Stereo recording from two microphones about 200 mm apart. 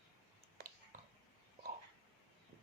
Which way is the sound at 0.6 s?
45° right (ahead or behind).